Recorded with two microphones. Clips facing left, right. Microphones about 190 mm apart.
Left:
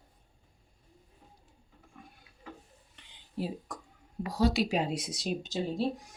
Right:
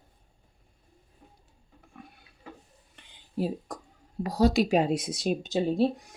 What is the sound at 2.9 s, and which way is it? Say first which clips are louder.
Whispering: right 5 dB; 40° right (ahead or behind).